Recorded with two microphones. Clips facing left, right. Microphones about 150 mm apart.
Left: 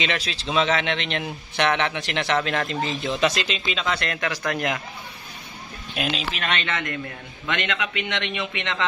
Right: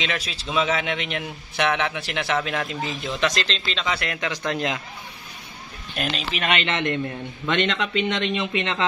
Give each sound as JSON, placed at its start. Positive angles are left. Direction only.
{"t": 0.0, "sound": "speech", "side_deg": 0}
{"t": 3.2, "sound": "speech", "side_deg": 5}
{"t": 4.0, "sound": "speech", "side_deg": -15}
{"t": 5.9, "sound": "speech", "side_deg": 0}
{"t": 6.7, "sound": "a man's voice", "side_deg": -25}